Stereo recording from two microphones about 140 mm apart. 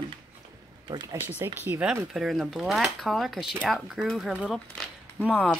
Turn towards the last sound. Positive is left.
turn(degrees=15)  # may be behind; listen again after turning